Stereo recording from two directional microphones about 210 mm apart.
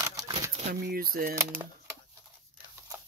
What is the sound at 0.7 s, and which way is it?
Speech, 45° right (ahead or behind).